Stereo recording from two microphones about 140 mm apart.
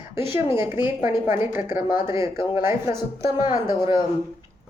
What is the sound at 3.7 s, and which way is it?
Speech, 30° left (ahead or behind).